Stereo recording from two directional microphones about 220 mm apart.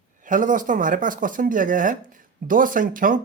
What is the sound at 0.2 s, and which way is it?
Speech, 35° right (ahead or behind).